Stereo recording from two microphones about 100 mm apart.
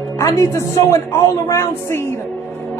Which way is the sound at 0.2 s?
30° left (ahead or behind).